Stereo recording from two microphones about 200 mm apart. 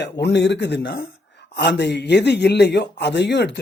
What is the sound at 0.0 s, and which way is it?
A man's voice, 60° left (ahead or behind).